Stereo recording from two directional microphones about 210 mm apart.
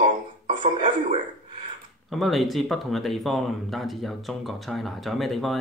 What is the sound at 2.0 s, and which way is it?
Speech, centre (ahead or behind).